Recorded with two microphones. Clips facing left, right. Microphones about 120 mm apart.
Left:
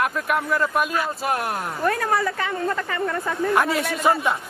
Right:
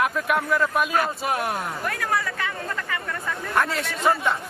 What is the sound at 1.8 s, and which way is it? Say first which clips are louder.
A woman's voice: left 7 dB; 30° left (ahead or behind).